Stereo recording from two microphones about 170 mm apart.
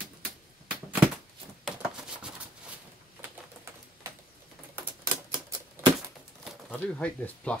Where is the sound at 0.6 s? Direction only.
10° right (ahead or behind).